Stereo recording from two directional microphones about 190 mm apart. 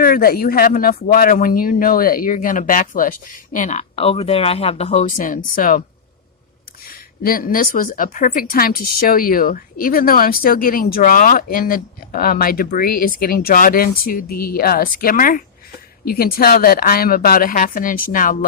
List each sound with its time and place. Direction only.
0.0 s a woman's voice: 50° left (ahead or behind)
6.8 s a woman's voice: 50° left (ahead or behind)